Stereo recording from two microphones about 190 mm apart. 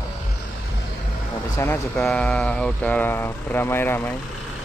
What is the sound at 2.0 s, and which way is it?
Speech, centre (ahead or behind).